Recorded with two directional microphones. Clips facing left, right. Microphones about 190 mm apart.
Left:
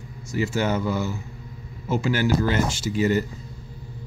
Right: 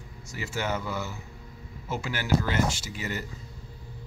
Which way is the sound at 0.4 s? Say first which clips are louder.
Left 8 dB; 35° left (ahead or behind).